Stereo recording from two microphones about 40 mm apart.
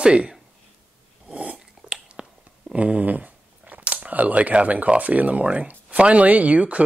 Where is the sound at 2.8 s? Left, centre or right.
Right.